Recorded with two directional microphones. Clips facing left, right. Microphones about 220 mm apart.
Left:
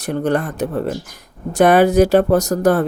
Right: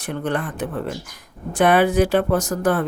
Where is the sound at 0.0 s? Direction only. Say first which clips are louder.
Left 6 dB; 40° left (ahead or behind).